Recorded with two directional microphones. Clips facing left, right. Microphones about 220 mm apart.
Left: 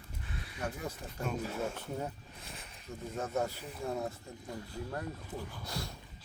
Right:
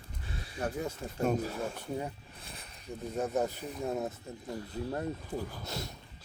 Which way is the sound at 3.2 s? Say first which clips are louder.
Right 3 dB; 20° right (ahead or behind).